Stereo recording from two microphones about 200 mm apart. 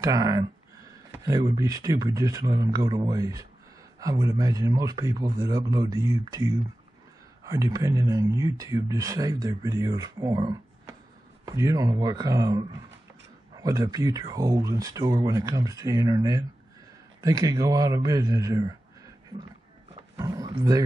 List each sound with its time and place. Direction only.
0.0 s a man's voice: 20° right (ahead or behind)
20.2 s speech: 15° right (ahead or behind)